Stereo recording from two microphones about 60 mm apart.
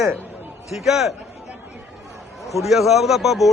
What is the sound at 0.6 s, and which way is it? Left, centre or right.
Speech, centre.